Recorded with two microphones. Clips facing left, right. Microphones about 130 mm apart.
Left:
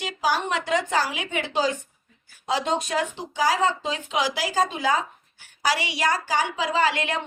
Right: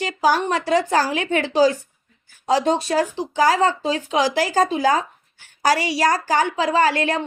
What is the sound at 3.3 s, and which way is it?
Speech, 50° right (ahead or behind).